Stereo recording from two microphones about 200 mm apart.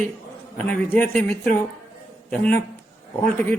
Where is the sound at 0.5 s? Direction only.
5° left (ahead or behind).